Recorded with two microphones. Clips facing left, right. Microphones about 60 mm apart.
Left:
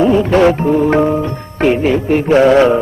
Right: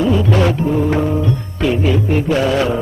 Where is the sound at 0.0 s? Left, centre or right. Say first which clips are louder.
Left 5 dB; left.